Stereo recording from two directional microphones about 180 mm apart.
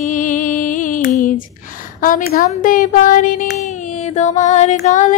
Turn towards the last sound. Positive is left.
turn(degrees=40)  # may be behind; listen again after turning